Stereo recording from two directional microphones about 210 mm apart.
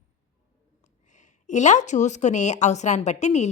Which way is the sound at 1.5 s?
35° left (ahead or behind).